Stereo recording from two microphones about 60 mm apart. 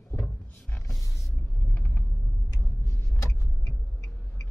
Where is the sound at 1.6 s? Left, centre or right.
Left.